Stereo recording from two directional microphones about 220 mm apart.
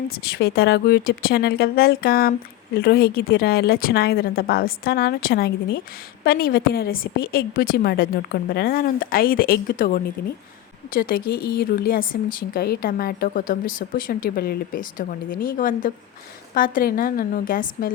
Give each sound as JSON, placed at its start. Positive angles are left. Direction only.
{"t": 0.1, "sound": "a woman's voice", "side_deg": 45}